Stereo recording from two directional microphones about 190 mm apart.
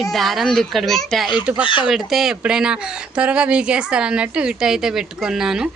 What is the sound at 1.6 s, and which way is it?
Speech, 25° left (ahead or behind).